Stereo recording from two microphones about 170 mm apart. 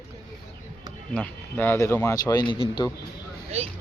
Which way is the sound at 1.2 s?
10° left (ahead or behind).